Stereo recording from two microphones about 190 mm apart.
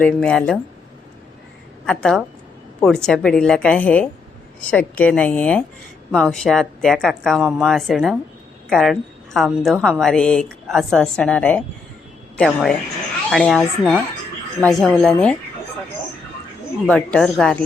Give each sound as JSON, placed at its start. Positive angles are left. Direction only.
{"t": 0.0, "sound": "speech", "side_deg": 5}
{"t": 1.9, "sound": "a woman's voice", "side_deg": 5}
{"t": 16.8, "sound": "speech", "side_deg": 5}